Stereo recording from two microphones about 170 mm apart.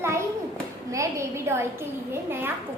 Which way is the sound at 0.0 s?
15° right (ahead or behind).